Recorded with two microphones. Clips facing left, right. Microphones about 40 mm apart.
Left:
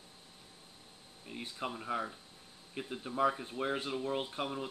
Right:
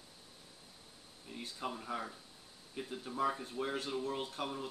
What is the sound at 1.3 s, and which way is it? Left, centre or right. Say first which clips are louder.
Speech: left 2 dB; left.